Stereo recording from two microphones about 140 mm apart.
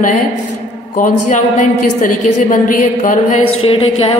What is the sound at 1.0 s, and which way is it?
A woman's voice, 65° left (ahead or behind).